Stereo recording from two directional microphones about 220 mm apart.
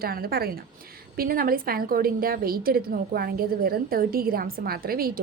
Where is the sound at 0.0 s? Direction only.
45° right (ahead or behind).